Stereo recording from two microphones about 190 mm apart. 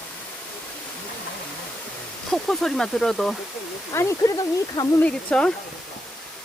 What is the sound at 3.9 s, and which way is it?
Speech, 15° left (ahead or behind).